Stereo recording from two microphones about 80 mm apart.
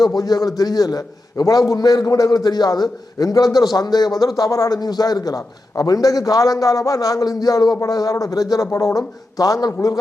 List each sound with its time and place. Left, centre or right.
0.0 s a man's voice: left